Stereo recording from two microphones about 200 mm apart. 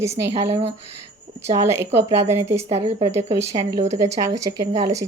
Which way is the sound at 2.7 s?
30° right (ahead or behind).